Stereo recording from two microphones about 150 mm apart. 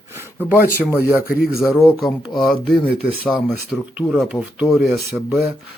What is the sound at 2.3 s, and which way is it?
Speech, centre (ahead or behind).